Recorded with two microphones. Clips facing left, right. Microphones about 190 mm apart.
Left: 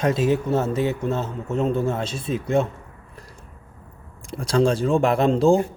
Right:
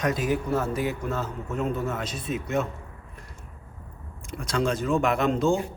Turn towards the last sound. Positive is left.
turn(degrees=35)  # may be behind; listen again after turning